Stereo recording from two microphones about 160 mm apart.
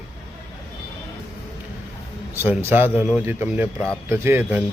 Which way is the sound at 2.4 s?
15° right (ahead or behind).